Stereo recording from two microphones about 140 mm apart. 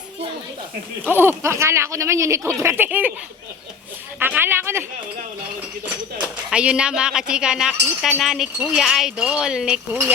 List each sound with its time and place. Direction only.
1.0 s speech: 15° right (ahead or behind)
4.2 s speech: 15° right (ahead or behind)
6.2 s speech: 10° right (ahead or behind)